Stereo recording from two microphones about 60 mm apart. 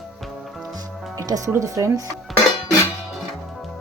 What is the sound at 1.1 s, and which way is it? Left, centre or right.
Music, right.